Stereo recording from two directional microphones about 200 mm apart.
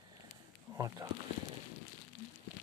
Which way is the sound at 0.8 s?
15° right (ahead or behind).